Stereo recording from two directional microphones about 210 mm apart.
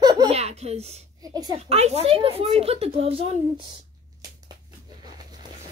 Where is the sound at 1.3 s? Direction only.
20° right (ahead or behind).